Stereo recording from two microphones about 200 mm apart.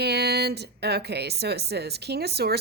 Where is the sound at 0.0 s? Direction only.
55° right (ahead or behind).